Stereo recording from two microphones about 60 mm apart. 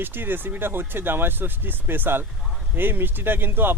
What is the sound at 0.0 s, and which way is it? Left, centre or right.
Speech, right.